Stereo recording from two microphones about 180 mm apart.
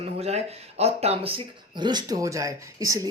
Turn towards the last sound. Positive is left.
turn(degrees=-20)  # may be behind; listen again after turning